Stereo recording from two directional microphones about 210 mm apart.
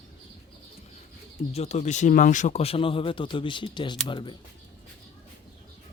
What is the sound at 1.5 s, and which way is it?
Speech, 30° left (ahead or behind).